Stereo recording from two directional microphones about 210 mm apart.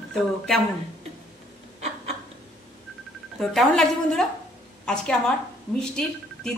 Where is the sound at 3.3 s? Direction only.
Centre (ahead or behind).